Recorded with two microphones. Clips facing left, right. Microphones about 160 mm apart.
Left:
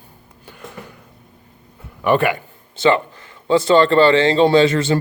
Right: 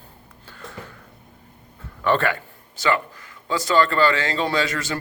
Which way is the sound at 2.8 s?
25° left (ahead or behind).